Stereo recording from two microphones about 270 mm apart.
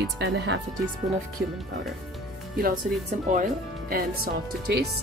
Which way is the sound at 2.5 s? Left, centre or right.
Right.